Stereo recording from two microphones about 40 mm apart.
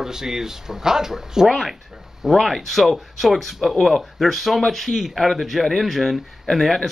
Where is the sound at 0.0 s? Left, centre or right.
Centre.